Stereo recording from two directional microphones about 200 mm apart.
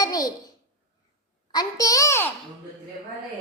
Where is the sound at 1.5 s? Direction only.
20° left (ahead or behind).